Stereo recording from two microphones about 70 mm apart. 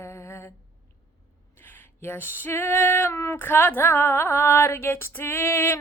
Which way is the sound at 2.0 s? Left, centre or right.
Left.